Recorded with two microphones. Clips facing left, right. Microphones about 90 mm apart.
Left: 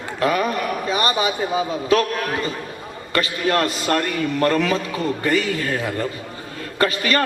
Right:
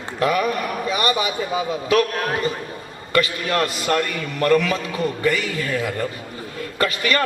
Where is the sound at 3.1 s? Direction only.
35° left (ahead or behind).